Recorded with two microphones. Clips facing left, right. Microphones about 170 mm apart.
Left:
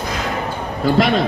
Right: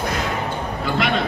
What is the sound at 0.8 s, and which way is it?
Speech, 40° left (ahead or behind).